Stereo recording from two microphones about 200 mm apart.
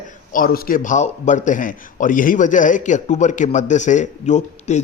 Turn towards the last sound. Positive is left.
turn(degrees=35)  # may be behind; listen again after turning